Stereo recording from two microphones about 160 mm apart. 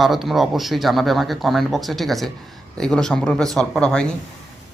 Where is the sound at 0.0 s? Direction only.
Centre (ahead or behind).